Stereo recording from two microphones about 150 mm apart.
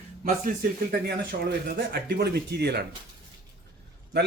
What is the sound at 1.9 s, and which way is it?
Speech, 90° right.